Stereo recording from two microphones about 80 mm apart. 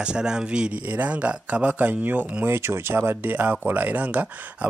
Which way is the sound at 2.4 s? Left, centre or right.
Right.